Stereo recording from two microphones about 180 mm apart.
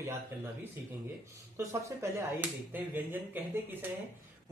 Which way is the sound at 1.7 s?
15° right (ahead or behind).